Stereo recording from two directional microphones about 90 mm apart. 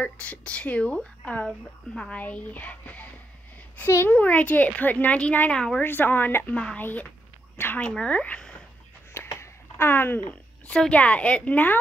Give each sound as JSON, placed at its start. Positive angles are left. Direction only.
{"t": 0.0, "sound": "a woman's voice", "side_deg": 15}
{"t": 5.9, "sound": "a woman's voice", "side_deg": 20}
{"t": 7.8, "sound": "a woman's voice", "side_deg": 10}
{"t": 9.1, "sound": "a sound", "side_deg": 30}
{"t": 10.8, "sound": "a woman's voice", "side_deg": 15}